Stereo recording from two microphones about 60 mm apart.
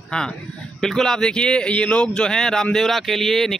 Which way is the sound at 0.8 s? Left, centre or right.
Centre.